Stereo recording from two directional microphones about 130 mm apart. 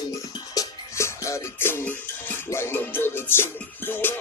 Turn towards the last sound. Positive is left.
turn(degrees=15)  # may be behind; listen again after turning